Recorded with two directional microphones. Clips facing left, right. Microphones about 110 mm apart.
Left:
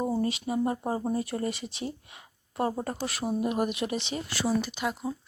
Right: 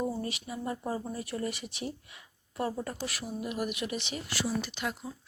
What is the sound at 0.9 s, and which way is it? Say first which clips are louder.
Speech: left 6 dB; 45° left (ahead or behind).